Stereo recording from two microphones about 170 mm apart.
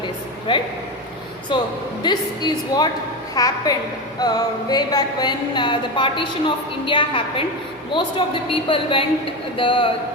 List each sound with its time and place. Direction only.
0.5 s a woman's voice: 30° left (ahead or behind)
8.6 s a woman's voice: 30° left (ahead or behind)